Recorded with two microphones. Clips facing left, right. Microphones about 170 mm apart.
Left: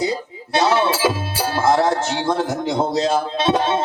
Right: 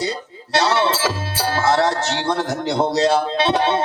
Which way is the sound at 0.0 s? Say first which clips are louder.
Left 3 dB; 75° right (ahead or behind).